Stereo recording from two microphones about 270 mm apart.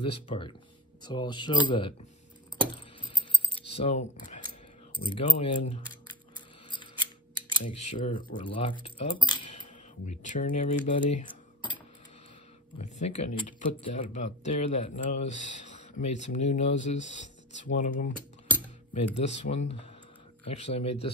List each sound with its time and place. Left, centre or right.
0.0 s speech: centre
3.0 s keys jangling: centre
6.7 s scissors: centre
7.6 s speech: left
19.1 s speech: left